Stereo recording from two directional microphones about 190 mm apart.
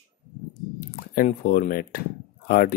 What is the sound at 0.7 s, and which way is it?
Speech, 45° left (ahead or behind).